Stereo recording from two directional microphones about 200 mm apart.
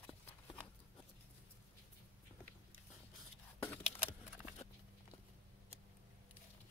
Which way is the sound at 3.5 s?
10° left (ahead or behind).